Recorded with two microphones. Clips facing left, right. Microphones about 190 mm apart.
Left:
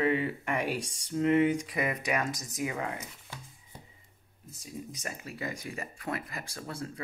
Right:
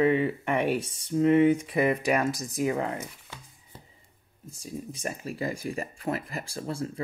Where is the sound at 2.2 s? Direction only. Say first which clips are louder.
Right 7 dB; 35° right (ahead or behind).